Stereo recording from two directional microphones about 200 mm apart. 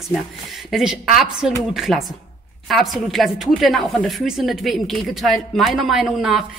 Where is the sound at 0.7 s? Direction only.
Centre (ahead or behind).